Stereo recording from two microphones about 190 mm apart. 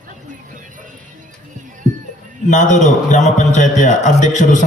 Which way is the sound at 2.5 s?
40° left (ahead or behind).